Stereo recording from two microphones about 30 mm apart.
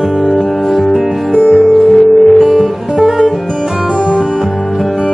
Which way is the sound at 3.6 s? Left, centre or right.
Centre.